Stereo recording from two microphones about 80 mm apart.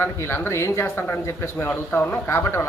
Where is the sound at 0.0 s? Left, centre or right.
Left.